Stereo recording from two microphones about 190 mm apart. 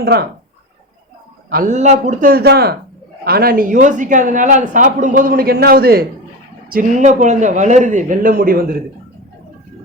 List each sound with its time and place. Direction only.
0.0 s speech: 60° right (ahead or behind)
1.5 s a woman's voice: 45° right (ahead or behind)